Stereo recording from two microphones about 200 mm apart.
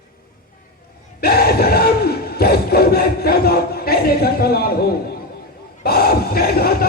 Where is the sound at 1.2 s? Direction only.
50° left (ahead or behind).